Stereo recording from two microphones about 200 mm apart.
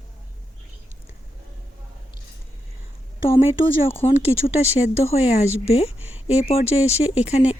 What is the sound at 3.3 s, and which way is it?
Speech, 25° left (ahead or behind).